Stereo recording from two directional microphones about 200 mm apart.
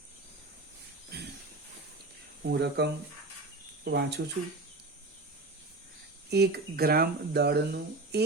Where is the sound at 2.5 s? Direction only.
55° right (ahead or behind).